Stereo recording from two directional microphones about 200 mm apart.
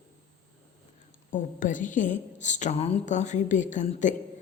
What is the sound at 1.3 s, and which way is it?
A woman's voice, 40° left (ahead or behind).